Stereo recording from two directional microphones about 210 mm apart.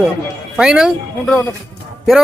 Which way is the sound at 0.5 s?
5° right (ahead or behind).